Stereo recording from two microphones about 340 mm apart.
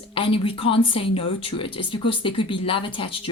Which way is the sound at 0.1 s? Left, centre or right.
Centre.